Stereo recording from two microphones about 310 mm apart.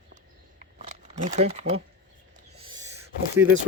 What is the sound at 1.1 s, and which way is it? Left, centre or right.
Speech, right.